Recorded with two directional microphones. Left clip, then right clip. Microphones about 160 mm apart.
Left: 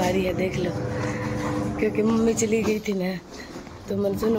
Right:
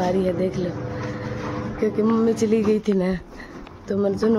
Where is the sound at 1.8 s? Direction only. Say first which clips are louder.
Right 2 dB; 30° right (ahead or behind).